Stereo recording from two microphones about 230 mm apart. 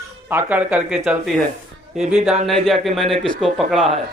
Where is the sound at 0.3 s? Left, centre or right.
Centre.